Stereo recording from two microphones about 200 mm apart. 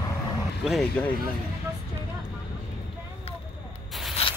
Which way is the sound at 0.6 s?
Centre (ahead or behind).